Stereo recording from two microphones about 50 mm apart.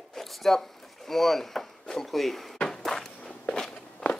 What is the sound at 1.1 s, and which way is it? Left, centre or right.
Chop, centre.